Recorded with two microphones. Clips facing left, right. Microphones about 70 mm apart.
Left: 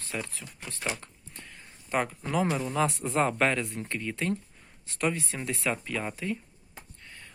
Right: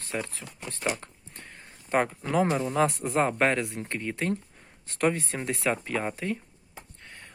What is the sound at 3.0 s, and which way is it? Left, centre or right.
Speech, centre.